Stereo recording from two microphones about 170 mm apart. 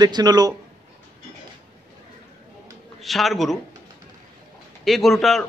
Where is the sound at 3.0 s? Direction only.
Centre (ahead or behind).